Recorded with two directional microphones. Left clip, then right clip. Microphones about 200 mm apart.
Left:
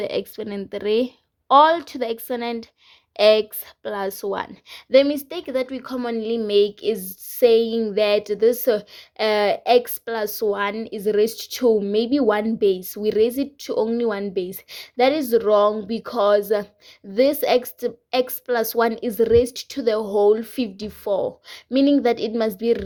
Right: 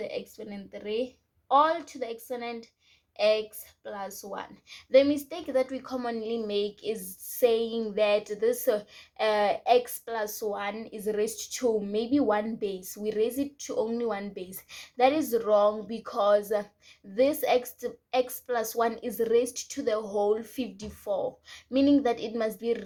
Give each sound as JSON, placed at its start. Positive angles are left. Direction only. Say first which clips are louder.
{"t": 0.0, "sound": "a woman's voice", "louder": "left 10 dB", "side_deg": 55}